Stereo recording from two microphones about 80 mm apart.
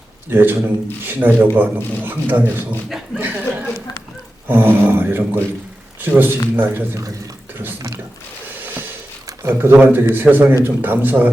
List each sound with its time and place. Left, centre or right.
0.3 s a man's voice: right
3.2 s a sound: right
4.4 s a man's voice: right
9.4 s a man's voice: right